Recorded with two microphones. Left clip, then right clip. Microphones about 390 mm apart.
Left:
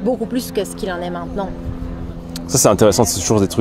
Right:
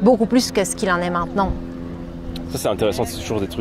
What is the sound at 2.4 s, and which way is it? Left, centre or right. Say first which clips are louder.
Speech: left 8 dB; left.